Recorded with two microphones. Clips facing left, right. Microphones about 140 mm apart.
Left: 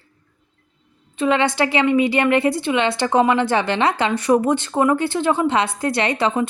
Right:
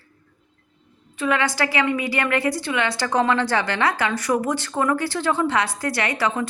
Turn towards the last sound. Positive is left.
turn(degrees=25)  # may be behind; listen again after turning